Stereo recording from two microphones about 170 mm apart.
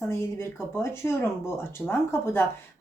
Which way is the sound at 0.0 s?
15° left (ahead or behind).